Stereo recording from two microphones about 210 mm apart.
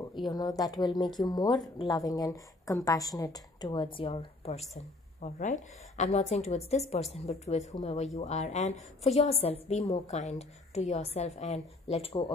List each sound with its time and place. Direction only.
0.1 s a woman's voice: 20° left (ahead or behind)